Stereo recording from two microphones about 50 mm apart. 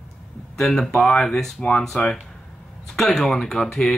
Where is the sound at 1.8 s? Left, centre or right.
Centre.